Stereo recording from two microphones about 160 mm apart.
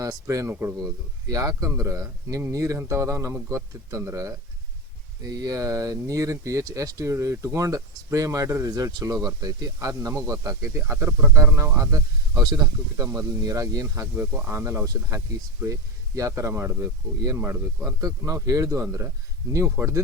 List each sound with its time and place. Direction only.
0.0 s speech: 20° right (ahead or behind)